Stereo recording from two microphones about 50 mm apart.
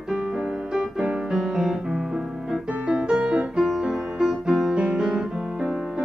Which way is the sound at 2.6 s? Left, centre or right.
Right.